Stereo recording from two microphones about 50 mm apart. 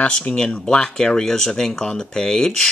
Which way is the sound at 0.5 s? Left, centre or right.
Centre.